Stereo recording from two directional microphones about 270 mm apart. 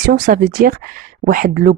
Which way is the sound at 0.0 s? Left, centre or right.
Right.